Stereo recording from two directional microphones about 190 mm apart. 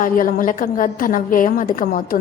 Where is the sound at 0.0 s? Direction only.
45° left (ahead or behind).